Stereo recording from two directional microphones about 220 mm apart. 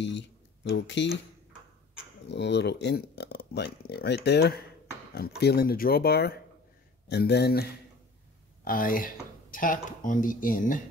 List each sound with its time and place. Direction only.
0.7 s speech: 50° left (ahead or behind)
2.2 s speech: 50° left (ahead or behind)
8.6 s speech: 40° left (ahead or behind)